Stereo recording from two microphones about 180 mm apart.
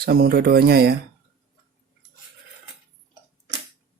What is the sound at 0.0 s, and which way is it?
Speech, 60° right (ahead or behind).